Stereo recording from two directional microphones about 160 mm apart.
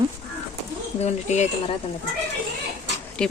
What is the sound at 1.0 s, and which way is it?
Speech, 45° left (ahead or behind).